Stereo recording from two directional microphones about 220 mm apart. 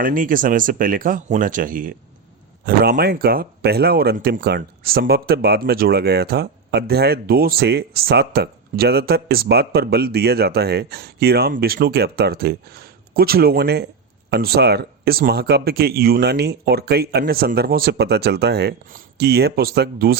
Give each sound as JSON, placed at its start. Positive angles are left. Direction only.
{"t": 0.0, "sound": "speech", "side_deg": -40}